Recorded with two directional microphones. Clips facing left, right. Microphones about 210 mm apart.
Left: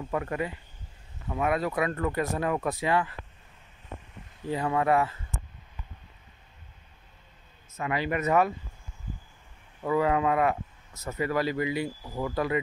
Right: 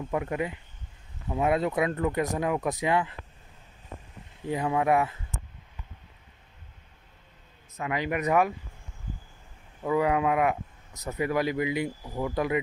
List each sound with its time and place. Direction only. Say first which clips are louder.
0.1 s speech: right 1 dB; 15° right (ahead or behind)
4.5 s speech: right 1 dB; 15° right (ahead or behind)
7.8 s speech: even; 15° right (ahead or behind)
9.8 s speech: even; 10° right (ahead or behind)